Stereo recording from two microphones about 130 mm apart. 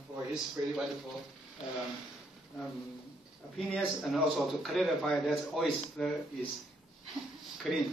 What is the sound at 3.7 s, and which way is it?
A man's voice, centre (ahead or behind).